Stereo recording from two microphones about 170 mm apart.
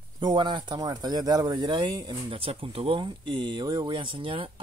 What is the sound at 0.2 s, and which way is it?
Speech, 25° right (ahead or behind).